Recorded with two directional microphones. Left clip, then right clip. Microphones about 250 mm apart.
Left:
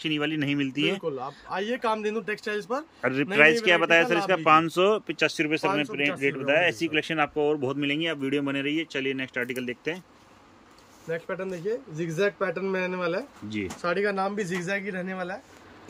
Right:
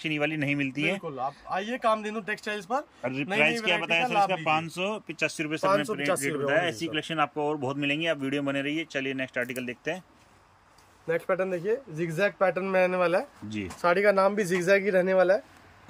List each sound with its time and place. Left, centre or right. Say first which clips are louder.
0.0 s speech: left 1 dB; centre
3.0 s speech: left 7 dB; centre
11.1 s speech: right 4 dB; centre